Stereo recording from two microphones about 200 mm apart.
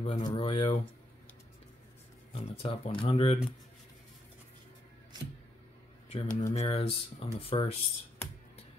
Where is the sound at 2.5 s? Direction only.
25° left (ahead or behind).